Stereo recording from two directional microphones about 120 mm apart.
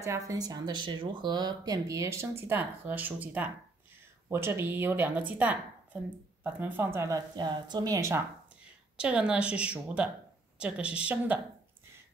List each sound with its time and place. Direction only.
0.0 s speech: 25° right (ahead or behind)
8.9 s a woman's voice: 10° right (ahead or behind)